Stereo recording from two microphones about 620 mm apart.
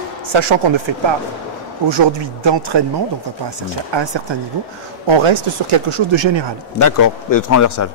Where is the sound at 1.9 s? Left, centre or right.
Right.